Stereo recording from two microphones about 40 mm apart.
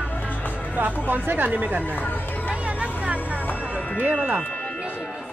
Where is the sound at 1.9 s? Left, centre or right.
Left.